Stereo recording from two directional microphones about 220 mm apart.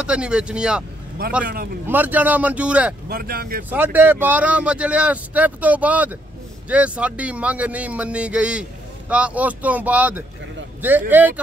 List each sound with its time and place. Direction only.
0.0 s a man's voice: 5° right (ahead or behind)
1.4 s speech: 40° right (ahead or behind)
1.9 s speech: 10° right (ahead or behind)
3.1 s speech: 45° right (ahead or behind)
3.7 s a man's voice: 10° right (ahead or behind)